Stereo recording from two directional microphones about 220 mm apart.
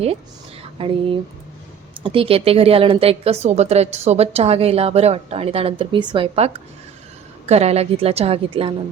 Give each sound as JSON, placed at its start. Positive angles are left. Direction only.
{"t": 0.8, "sound": "a woman's voice", "side_deg": -25}